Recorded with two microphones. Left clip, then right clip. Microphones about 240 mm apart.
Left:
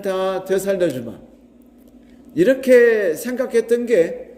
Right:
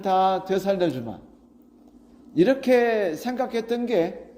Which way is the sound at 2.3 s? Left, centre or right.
Right.